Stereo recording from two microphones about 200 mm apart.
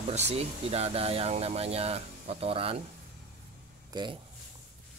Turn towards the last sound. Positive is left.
turn(degrees=-20)  # may be behind; listen again after turning